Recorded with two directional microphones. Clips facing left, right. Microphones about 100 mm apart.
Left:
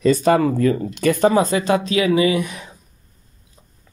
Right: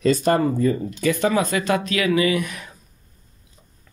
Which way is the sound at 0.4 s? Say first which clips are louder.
Left 2 dB; 85° left.